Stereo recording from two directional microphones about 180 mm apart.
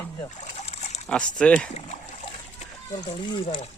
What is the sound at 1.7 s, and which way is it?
Speech, 40° left (ahead or behind).